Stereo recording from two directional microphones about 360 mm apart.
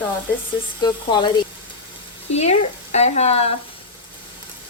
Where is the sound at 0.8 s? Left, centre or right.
Centre.